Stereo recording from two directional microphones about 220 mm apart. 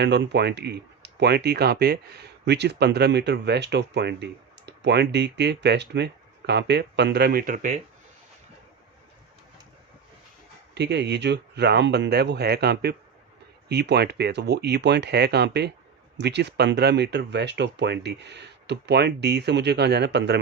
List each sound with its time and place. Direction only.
0.0 s speech: 50° right (ahead or behind); by 7.8 s 35° right (ahead or behind)
10.8 s speech: 50° right (ahead or behind)